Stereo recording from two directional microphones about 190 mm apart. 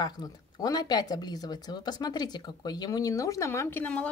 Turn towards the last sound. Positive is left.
turn(degrees=10)  # may be behind; listen again after turning